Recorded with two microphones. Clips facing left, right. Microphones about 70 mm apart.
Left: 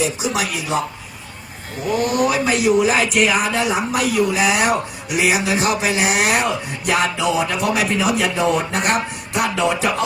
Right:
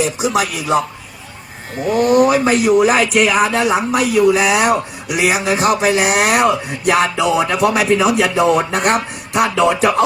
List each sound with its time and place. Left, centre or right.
0.2 s speech: right
2.0 s speech: right